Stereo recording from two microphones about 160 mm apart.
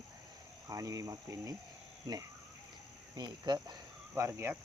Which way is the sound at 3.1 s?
25° right (ahead or behind).